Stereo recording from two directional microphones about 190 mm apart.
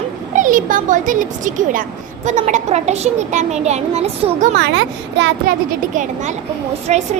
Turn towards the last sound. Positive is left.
turn(degrees=-35)  # may be behind; listen again after turning